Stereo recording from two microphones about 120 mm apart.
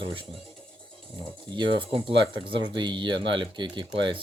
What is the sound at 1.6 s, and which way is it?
Speech, 45° right (ahead or behind).